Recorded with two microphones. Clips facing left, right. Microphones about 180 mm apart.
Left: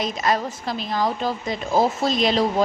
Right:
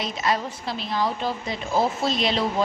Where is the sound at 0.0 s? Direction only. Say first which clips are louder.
Left 3 dB; 45° left (ahead or behind).